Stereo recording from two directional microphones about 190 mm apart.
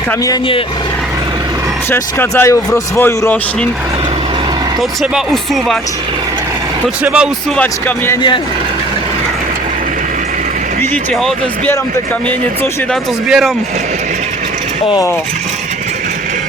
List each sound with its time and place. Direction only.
0.3 s speech: 25° left (ahead or behind)
1.9 s speech: 10° left (ahead or behind)
4.8 s speech: centre (ahead or behind)
6.8 s speech: 5° right (ahead or behind)
7.5 s speech: 10° left (ahead or behind)
10.9 s speech: centre (ahead or behind)
12.9 s speech: centre (ahead or behind)
14.8 s speech: 20° left (ahead or behind)